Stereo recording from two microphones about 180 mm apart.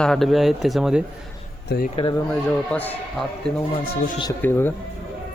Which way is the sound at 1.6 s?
55° left (ahead or behind).